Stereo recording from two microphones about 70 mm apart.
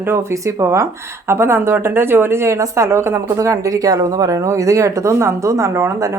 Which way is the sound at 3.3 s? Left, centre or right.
Right.